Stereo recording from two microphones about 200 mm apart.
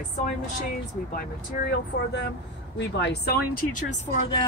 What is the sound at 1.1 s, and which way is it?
Speech, 55° left (ahead or behind).